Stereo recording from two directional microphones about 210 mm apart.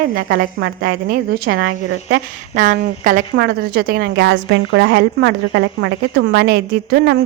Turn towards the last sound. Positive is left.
turn(degrees=-55)  # may be behind; listen again after turning